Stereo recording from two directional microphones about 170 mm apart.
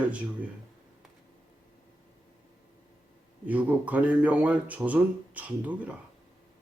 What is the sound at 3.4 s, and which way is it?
Speech, 10° right (ahead or behind).